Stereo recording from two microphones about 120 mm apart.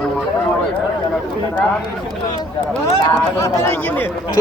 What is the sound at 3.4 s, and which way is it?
Speech, 20° left (ahead or behind).